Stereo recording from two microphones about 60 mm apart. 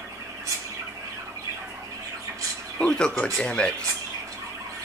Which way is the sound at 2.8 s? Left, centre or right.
Centre.